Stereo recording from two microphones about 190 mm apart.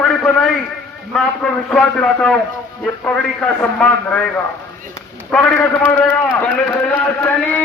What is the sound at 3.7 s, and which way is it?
Speech, 5° left (ahead or behind).